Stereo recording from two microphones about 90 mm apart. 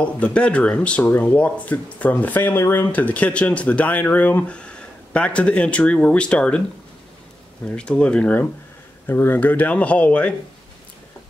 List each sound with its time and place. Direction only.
0.0 s speech: 15° left (ahead or behind)
7.6 s speech: 10° left (ahead or behind)